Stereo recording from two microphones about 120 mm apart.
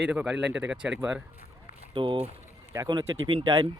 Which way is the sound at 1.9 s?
45° right (ahead or behind).